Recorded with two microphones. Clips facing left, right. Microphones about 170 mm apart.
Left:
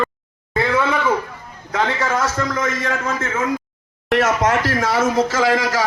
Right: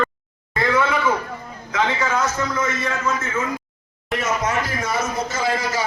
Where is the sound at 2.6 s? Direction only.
85° left.